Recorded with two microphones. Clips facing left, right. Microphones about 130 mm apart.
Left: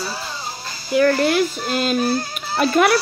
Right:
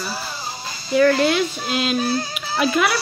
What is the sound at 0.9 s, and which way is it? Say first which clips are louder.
Speech: even; 5° left (ahead or behind).